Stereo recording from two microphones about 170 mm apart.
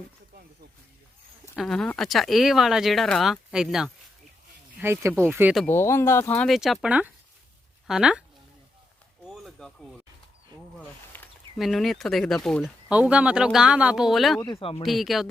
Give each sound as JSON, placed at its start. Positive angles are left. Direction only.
{"t": 1.5, "sound": "speech", "side_deg": 0}
{"t": 5.6, "sound": "speech", "side_deg": 15}
{"t": 6.5, "sound": "speech", "side_deg": 0}
{"t": 9.3, "sound": "a sound", "side_deg": 0}
{"t": 10.8, "sound": "snake", "side_deg": 10}
{"t": 11.5, "sound": "speech", "side_deg": 0}
{"t": 14.6, "sound": "speech", "side_deg": 30}
{"t": 14.8, "sound": "speech", "side_deg": 0}